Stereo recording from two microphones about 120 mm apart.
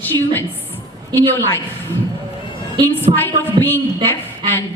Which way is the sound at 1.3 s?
20° left (ahead or behind).